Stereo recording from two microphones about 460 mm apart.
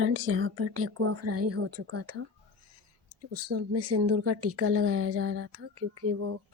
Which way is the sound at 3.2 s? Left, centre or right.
Right.